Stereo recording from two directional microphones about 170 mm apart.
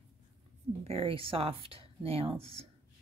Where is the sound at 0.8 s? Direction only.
35° right (ahead or behind).